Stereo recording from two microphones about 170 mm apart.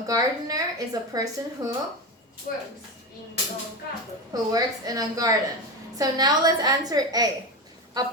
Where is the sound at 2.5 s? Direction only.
55° left (ahead or behind).